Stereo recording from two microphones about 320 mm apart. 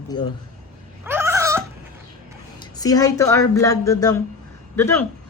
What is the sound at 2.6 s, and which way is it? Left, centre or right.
A woman's voice, centre.